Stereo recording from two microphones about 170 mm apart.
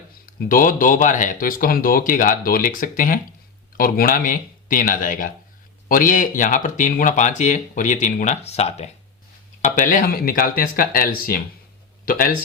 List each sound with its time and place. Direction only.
0.3 s speech: 55° left (ahead or behind)